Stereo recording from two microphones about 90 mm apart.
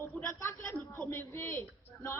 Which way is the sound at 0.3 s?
35° left (ahead or behind).